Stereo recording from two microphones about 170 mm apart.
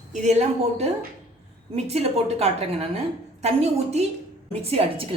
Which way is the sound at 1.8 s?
40° right (ahead or behind).